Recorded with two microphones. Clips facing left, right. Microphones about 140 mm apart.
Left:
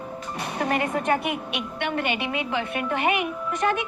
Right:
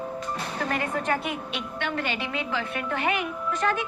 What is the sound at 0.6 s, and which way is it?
Speech, 15° left (ahead or behind).